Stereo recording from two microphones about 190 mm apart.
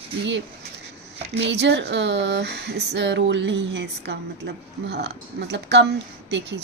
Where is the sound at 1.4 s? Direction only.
65° right (ahead or behind).